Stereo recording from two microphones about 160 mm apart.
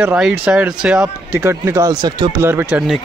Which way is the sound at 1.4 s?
20° right (ahead or behind).